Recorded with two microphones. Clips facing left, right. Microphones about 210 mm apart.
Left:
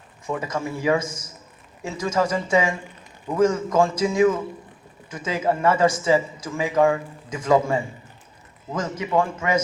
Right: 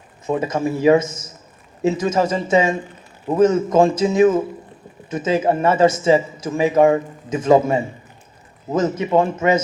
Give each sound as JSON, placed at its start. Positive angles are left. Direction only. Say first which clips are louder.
{"t": 0.3, "sound": "speech", "louder": "right 7 dB", "side_deg": -25}